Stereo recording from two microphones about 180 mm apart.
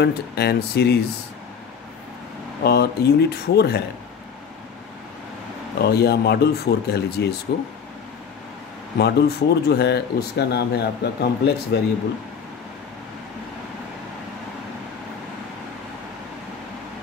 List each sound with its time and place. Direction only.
0.0 s speech: 65° left (ahead or behind)
2.6 s speech: 65° left (ahead or behind)
5.8 s speech: 65° left (ahead or behind)
8.9 s speech: 65° left (ahead or behind)